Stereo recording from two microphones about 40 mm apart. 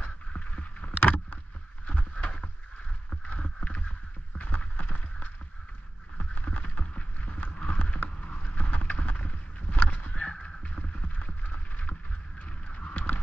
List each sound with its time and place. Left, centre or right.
0.3 s boat: left
0.9 s rowboat: left
1.9 s boat: left
4.6 s a sound: left
7.5 s clip-clop: left
7.8 s vehicle: left
8.4 s rowboat: left
10.1 s clip-clop: left
11.4 s a sound: left
12.9 s clip-clop: left